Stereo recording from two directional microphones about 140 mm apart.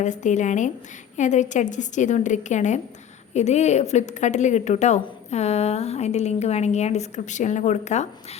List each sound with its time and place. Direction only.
0.0 s a woman's voice: 60° left (ahead or behind)